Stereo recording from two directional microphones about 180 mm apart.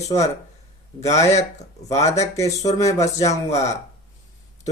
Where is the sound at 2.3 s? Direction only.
20° left (ahead or behind).